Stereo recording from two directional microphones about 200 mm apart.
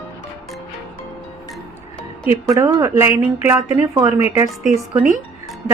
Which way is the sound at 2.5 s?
15° right (ahead or behind).